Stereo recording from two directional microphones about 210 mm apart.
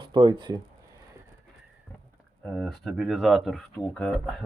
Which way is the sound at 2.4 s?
5° left (ahead or behind).